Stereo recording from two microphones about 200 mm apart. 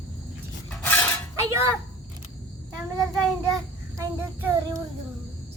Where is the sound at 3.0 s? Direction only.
15° right (ahead or behind).